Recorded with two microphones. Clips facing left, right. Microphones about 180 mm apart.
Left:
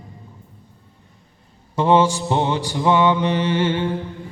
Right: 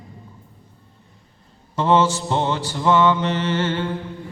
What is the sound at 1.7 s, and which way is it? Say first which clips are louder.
Speech: left 2 dB; 15° left (ahead or behind).